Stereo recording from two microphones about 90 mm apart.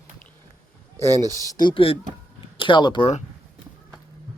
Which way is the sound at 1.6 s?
80° left.